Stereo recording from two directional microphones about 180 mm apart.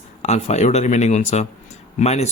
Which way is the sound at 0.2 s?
35° left (ahead or behind).